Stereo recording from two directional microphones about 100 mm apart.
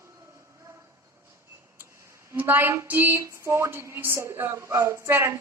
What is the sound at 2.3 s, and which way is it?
A woman's voice, 20° right (ahead or behind).